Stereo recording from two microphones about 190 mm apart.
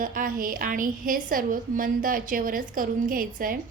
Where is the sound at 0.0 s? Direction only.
45° right (ahead or behind).